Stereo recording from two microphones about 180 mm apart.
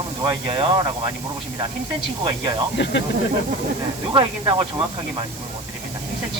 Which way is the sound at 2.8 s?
80° left.